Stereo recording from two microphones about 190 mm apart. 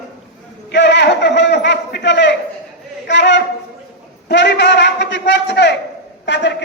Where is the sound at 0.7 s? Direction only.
65° left (ahead or behind).